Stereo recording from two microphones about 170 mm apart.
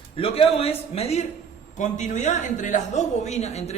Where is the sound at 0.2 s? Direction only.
35° left (ahead or behind).